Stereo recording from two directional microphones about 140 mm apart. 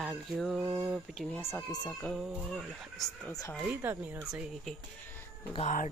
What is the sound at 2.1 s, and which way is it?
Speech, 5° right (ahead or behind).